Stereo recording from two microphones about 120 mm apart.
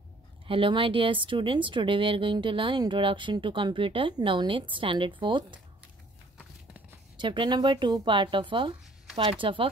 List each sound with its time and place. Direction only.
0.5 s speech: 45° right (ahead or behind)
7.2 s speech: 40° right (ahead or behind)